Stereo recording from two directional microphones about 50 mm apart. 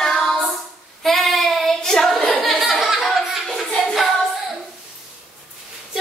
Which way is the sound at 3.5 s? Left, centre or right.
Centre.